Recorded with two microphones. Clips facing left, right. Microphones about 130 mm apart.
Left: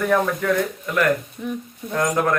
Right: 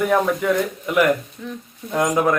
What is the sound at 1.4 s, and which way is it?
Speech, 15° left (ahead or behind).